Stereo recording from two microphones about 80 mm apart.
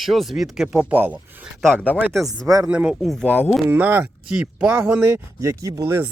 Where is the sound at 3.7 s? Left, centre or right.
Right.